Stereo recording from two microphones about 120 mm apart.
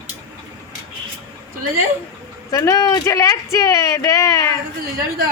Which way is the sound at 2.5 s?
30° left (ahead or behind).